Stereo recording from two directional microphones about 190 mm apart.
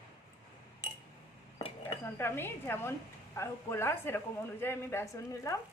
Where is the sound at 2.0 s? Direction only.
10° left (ahead or behind).